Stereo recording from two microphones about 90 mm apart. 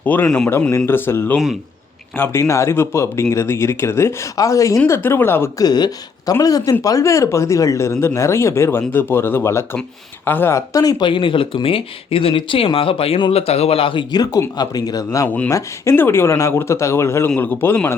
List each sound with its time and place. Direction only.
0.0 s a man's voice: 20° left (ahead or behind); by 4.8 s 35° left (ahead or behind)
4.9 s speech: 25° left (ahead or behind)
5.5 s speech: 50° left (ahead or behind); by 10.6 s 25° left (ahead or behind)
10.7 s speech: 40° left (ahead or behind)
11.0 s speech: 70° left (ahead or behind)
14.1 s speech: 45° left (ahead or behind); by 17.7 s 20° left (ahead or behind)